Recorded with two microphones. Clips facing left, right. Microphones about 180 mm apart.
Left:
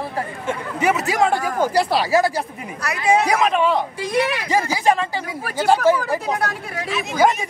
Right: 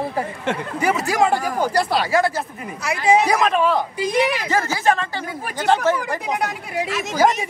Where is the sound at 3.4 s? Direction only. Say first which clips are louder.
Even; centre (ahead or behind).